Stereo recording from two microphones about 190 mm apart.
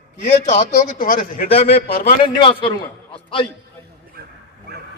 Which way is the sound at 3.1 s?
25° left (ahead or behind).